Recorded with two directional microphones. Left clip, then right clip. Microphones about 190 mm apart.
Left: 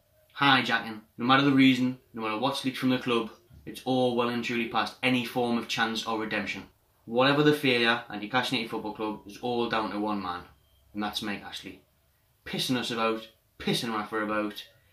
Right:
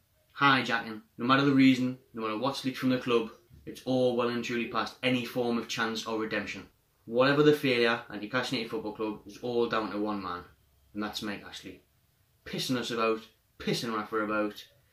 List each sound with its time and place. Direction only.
0.3 s speech: 5° left (ahead or behind)
12.4 s speech: 5° left (ahead or behind)